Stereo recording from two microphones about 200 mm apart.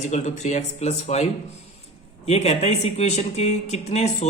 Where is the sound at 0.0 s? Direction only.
35° left (ahead or behind).